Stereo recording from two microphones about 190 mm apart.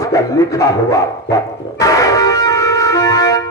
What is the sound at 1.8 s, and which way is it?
Music, 20° left (ahead or behind).